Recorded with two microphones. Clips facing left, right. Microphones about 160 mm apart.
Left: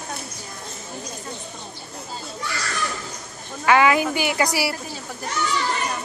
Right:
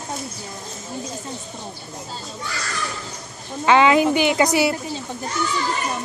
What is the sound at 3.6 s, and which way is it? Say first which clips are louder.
A woman's voice: right 3 dB; 20° right (ahead or behind).